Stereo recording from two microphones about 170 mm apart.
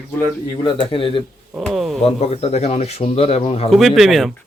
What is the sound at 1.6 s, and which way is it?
Speech, centre (ahead or behind).